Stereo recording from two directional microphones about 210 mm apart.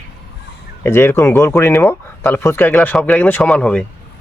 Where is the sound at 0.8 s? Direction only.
10° left (ahead or behind).